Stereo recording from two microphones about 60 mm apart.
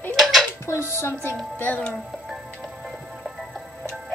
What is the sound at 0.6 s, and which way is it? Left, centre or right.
Speech, left.